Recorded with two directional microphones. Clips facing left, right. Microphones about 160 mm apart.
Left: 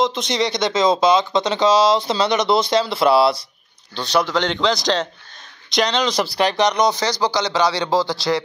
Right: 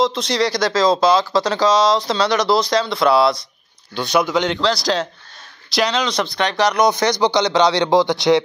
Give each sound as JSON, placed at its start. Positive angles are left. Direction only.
{"t": 0.0, "sound": "speech", "side_deg": 0}
{"t": 3.9, "sound": "speech", "side_deg": -10}
{"t": 6.9, "sound": "a man's voice", "side_deg": -15}